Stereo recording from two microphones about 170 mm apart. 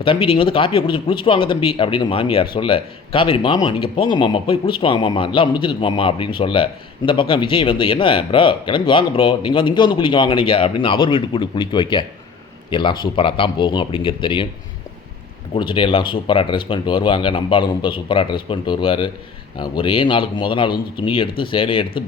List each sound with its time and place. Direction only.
0.0 s speech: 30° left (ahead or behind)
15.5 s speech: 30° left (ahead or behind)